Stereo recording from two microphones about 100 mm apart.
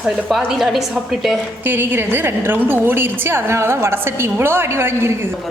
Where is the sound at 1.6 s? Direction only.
20° right (ahead or behind).